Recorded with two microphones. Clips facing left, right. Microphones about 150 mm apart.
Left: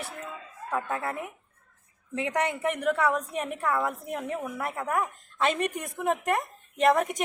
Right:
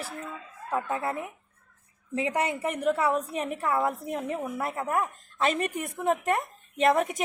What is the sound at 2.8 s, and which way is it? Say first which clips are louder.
Speech: right 1 dB; 25° right (ahead or behind).